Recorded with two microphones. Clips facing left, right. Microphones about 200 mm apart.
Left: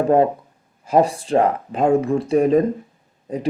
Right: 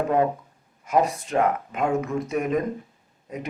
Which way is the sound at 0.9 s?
30° left (ahead or behind).